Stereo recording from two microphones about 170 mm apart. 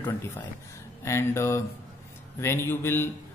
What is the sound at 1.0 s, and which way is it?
A man's voice, 15° left (ahead or behind).